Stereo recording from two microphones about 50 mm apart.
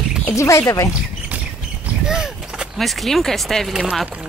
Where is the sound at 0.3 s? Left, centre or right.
Left.